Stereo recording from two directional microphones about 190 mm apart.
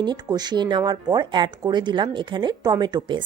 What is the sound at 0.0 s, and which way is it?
A woman's voice, 20° right (ahead or behind).